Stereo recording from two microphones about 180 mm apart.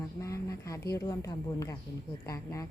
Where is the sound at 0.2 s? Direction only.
15° left (ahead or behind).